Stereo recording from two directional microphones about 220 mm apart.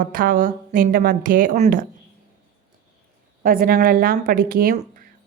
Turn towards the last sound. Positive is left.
turn(degrees=-35)  # may be behind; listen again after turning